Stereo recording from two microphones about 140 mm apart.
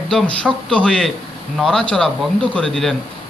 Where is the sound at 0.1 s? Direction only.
5° left (ahead or behind).